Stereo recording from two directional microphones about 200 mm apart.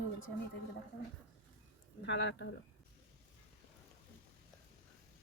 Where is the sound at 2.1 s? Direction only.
60° left (ahead or behind).